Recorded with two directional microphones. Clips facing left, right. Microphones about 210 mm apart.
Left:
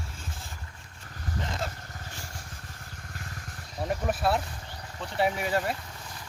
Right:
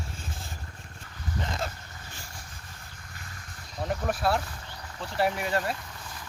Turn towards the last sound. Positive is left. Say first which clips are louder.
# even
turn(degrees=5)  # may be behind; listen again after turning